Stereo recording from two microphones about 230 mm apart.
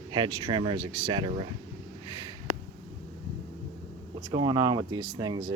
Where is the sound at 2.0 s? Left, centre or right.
Centre.